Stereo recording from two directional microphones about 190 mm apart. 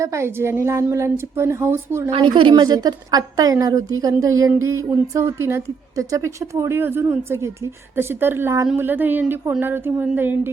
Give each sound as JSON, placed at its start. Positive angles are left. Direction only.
{"t": 0.0, "sound": "a woman's voice", "side_deg": -15}
{"t": 2.0, "sound": "a woman's voice", "side_deg": -25}